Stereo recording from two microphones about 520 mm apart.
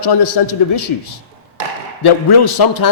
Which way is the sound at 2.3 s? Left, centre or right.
Left.